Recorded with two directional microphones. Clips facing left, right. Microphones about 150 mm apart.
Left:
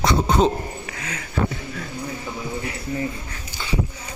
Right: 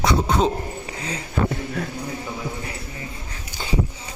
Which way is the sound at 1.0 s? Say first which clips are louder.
Right 5 dB; 30° right (ahead or behind).